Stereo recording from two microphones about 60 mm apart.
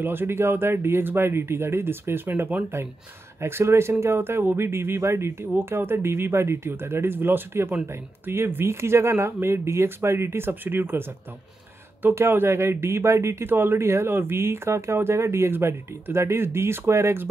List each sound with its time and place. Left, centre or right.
0.0 s speech: right
3.3 s speech: right
13.5 s speech: right